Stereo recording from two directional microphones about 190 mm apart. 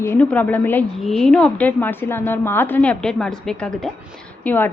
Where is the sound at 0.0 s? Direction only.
10° left (ahead or behind).